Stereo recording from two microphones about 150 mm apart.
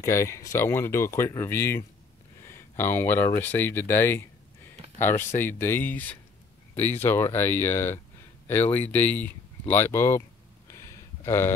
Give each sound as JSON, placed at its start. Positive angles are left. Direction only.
{"t": 0.0, "sound": "speech", "side_deg": 20}
{"t": 5.4, "sound": "speech", "side_deg": 15}
{"t": 10.7, "sound": "a sound", "side_deg": 20}